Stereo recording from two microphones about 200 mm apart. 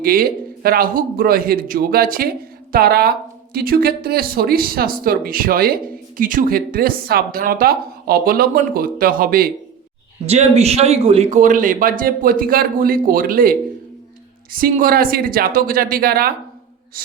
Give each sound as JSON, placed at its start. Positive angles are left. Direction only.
{"t": 0.0, "sound": "speech", "side_deg": -45}
{"t": 10.2, "sound": "speech", "side_deg": -35}